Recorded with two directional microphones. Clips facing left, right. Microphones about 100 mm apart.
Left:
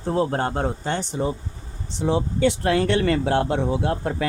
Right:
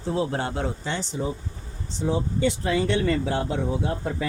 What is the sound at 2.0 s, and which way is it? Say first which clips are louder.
Speech: left 3 dB; 70° left (ahead or behind).